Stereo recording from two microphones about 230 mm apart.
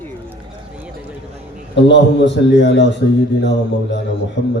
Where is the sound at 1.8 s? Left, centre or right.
Left.